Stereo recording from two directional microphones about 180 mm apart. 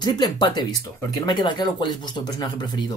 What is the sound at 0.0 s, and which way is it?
Speech, 25° left (ahead or behind).